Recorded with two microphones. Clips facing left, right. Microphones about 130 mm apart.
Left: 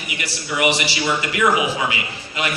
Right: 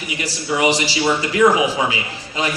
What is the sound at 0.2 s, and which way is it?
A man's voice, 35° right (ahead or behind).